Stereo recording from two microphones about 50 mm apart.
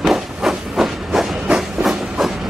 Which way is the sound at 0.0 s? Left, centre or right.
Centre.